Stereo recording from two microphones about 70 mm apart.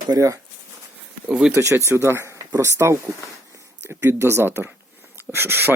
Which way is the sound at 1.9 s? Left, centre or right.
Right.